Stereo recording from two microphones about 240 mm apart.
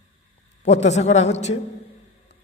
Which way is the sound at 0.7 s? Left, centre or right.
Left.